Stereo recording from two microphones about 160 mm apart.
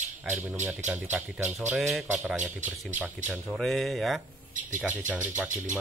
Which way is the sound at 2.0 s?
10° right (ahead or behind).